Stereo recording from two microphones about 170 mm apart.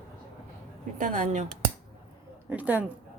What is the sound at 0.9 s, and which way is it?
Speech, 50° right (ahead or behind).